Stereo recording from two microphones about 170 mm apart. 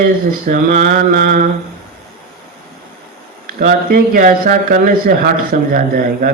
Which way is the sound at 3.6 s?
60° right (ahead or behind).